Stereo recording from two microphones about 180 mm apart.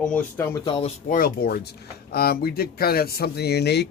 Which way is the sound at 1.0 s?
50° left (ahead or behind).